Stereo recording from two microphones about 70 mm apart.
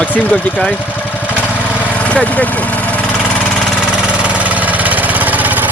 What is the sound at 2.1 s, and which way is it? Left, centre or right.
Speech, centre.